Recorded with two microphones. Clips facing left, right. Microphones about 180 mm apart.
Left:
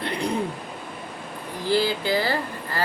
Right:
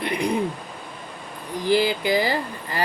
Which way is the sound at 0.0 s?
15° right (ahead or behind).